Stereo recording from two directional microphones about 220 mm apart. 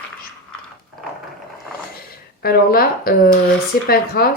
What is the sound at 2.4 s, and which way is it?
Speech, 45° left (ahead or behind).